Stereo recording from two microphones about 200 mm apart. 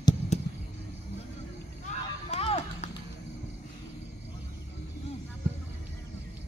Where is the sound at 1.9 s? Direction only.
35° left (ahead or behind).